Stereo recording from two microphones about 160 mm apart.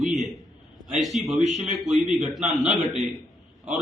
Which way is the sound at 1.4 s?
45° right (ahead or behind).